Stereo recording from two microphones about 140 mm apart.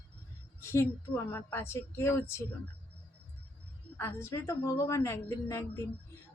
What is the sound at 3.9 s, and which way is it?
Speech, 20° left (ahead or behind).